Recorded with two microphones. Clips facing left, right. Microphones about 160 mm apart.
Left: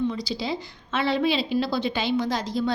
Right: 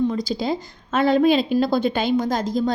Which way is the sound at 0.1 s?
50° right (ahead or behind).